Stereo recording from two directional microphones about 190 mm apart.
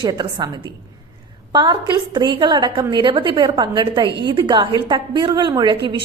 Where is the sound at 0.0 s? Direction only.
25° right (ahead or behind).